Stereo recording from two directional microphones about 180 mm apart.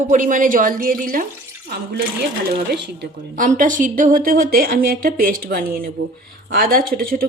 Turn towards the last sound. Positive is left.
turn(degrees=-55)  # may be behind; listen again after turning